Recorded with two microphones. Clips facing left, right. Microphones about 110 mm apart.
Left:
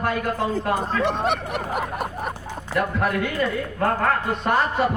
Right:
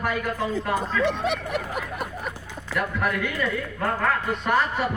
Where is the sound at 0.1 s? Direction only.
30° left (ahead or behind).